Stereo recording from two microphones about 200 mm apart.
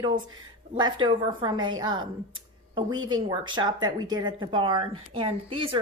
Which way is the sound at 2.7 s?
25° right (ahead or behind).